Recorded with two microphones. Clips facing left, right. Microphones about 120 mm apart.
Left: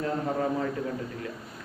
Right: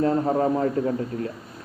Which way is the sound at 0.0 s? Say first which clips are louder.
Right 7 dB; 35° right (ahead or behind).